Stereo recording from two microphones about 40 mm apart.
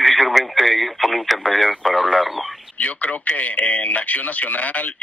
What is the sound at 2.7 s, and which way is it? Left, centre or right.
Speech, left.